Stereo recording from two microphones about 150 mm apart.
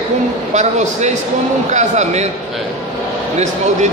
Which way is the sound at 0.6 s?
50° right (ahead or behind).